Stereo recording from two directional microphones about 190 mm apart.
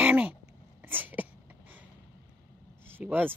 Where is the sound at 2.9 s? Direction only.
10° right (ahead or behind).